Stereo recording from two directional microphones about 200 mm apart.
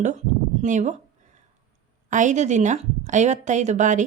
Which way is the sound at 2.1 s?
40° right (ahead or behind).